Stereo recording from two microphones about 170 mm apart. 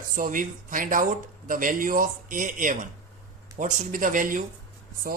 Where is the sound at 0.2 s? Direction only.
50° right (ahead or behind).